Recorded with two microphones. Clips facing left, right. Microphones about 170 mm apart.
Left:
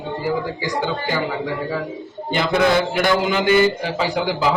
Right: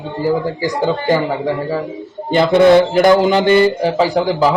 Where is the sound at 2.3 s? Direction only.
35° right (ahead or behind).